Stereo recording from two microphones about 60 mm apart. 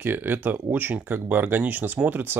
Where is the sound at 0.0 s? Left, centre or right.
Right.